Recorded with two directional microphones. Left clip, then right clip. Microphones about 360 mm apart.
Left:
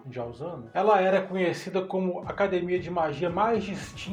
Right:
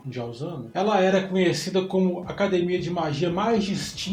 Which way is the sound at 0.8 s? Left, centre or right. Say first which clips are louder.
Even; centre.